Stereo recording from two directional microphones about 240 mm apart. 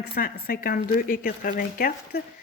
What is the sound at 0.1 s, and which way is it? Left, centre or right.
Speech, left.